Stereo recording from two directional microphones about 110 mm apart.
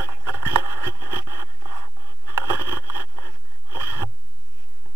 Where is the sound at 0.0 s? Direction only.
25° right (ahead or behind).